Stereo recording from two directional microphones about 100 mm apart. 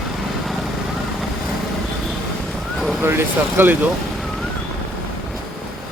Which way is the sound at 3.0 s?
25° right (ahead or behind).